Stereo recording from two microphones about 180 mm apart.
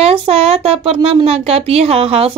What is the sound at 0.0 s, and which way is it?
Speech, 30° right (ahead or behind).